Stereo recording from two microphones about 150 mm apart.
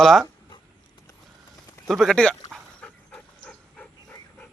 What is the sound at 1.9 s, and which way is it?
Speech, centre (ahead or behind).